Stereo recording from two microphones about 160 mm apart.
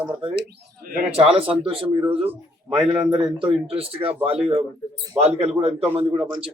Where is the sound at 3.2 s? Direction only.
5° right (ahead or behind).